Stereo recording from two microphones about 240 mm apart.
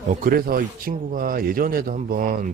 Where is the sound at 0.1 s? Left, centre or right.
Right.